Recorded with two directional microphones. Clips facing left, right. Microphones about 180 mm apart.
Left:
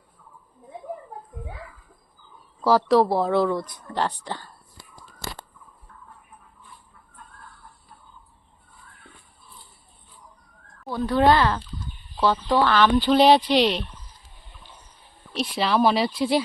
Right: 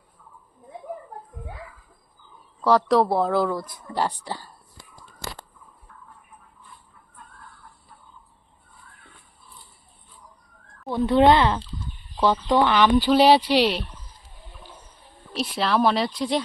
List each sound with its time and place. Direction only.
2.6 s speech: centre (ahead or behind)
10.9 s speech: 25° right (ahead or behind); by 13.8 s 10° right (ahead or behind)
15.3 s speech: centre (ahead or behind)